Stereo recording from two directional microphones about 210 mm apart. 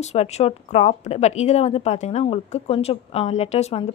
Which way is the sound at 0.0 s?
30° left (ahead or behind).